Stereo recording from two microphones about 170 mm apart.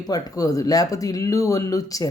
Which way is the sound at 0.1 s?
20° left (ahead or behind).